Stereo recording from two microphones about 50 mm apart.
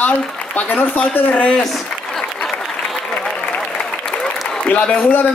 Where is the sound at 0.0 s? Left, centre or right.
Left.